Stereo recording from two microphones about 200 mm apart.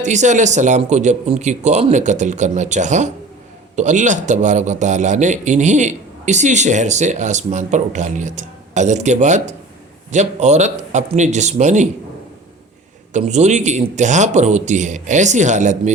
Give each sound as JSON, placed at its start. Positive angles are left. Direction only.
{"t": 0.0, "sound": "a man's voice", "side_deg": -35}
{"t": 13.1, "sound": "a man's voice", "side_deg": -35}